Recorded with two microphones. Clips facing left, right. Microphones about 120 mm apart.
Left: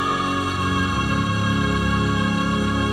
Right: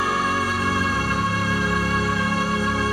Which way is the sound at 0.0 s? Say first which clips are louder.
Even; 20° left (ahead or behind).